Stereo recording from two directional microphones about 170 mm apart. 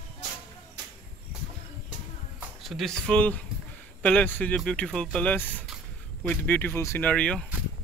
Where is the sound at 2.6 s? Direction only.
Centre (ahead or behind).